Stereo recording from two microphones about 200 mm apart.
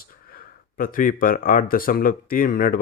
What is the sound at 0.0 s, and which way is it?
Speech, 45° left (ahead or behind).